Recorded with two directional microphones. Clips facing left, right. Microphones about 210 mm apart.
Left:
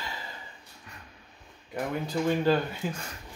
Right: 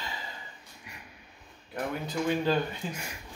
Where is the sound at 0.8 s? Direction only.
15° right (ahead or behind).